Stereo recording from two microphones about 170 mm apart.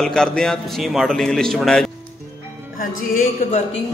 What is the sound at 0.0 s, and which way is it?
A man's voice, 5° left (ahead or behind).